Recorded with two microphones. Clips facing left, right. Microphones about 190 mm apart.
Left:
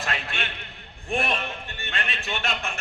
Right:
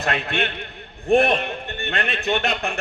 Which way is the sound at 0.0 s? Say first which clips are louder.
Right 8 dB; 60° right (ahead or behind).